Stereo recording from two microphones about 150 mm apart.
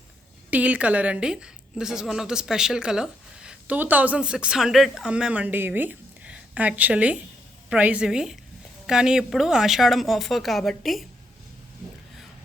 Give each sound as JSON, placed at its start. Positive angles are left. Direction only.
{"t": 0.5, "sound": "a woman's voice", "side_deg": -10}